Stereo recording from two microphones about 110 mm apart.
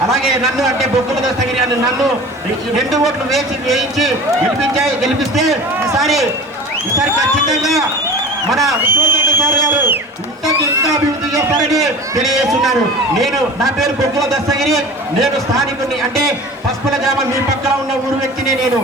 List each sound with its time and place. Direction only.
0.1 s a man's voice: centre (ahead or behind)
2.7 s a man's voice: centre (ahead or behind)
5.3 s a man's voice: centre (ahead or behind)
7.5 s a man's voice: centre (ahead or behind)
8.8 s speech: 20° right (ahead or behind)
12.2 s a man's voice: centre (ahead or behind)
16.9 s a man's voice: centre (ahead or behind)